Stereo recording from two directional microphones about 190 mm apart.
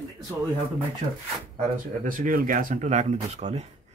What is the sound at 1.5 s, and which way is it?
Speech, 45° right (ahead or behind).